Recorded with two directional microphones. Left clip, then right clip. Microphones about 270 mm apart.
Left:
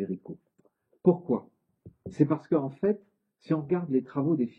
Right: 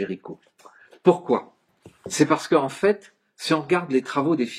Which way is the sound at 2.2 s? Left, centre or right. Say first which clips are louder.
Right 7 dB; centre.